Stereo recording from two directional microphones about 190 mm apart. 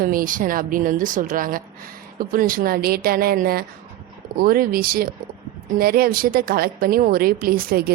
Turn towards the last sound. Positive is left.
turn(degrees=-50)  # may be behind; listen again after turning